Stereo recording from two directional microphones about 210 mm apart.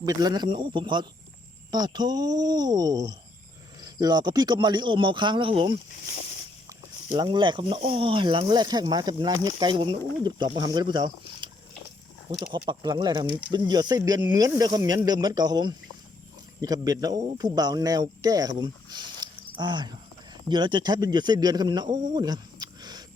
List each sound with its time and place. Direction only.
0.0 s speech: 20° right (ahead or behind)